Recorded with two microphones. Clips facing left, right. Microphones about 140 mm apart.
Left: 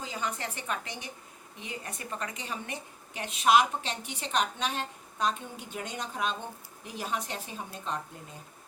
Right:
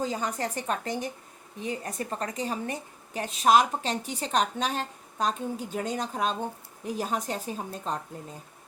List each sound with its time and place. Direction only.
0.0 s a woman's voice: 40° right (ahead or behind)